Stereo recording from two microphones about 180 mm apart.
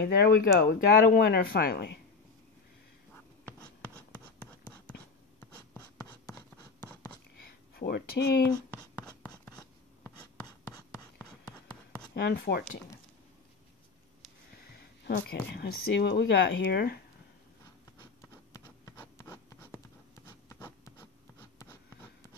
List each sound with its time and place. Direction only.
0.0 s speech: 65° left (ahead or behind)
3.9 s writing: 5° left (ahead or behind)
5.8 s writing: 15° left (ahead or behind)
7.7 s speech: 65° left (ahead or behind)
9.2 s writing: 10° left (ahead or behind)
10.4 s writing: 20° left (ahead or behind)
12.1 s speech: 65° left (ahead or behind)
15.0 s speech: 60° left (ahead or behind)
17.9 s a sound: 15° left (ahead or behind)
20.2 s writing: 15° left (ahead or behind)